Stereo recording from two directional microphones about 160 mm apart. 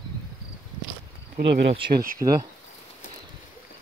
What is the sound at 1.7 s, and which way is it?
Speech, 30° right (ahead or behind).